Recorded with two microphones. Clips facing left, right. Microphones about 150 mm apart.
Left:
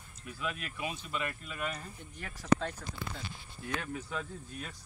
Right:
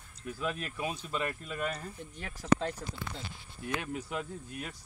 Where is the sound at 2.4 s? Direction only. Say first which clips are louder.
Right 1 dB; 25° right (ahead or behind).